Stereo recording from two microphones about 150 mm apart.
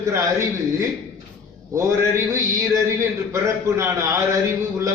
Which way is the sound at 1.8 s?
20° right (ahead or behind).